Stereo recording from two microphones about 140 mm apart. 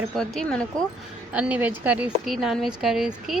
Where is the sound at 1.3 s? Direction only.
10° right (ahead or behind).